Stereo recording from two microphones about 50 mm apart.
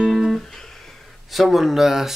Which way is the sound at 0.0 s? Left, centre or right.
Centre.